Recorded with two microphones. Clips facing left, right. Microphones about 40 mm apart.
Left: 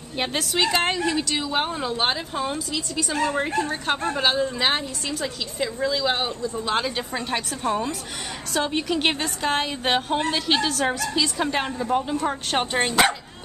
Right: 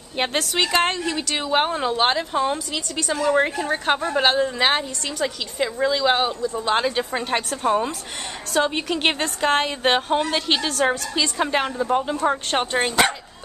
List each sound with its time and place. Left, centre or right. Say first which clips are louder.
0.1 s a woman's voice: right 2 dB; centre
1.0 s a woman's voice: left 1 dB; right
8.5 s speech: right 2 dB; centre